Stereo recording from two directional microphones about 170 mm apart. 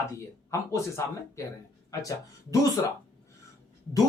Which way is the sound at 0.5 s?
15° left (ahead or behind).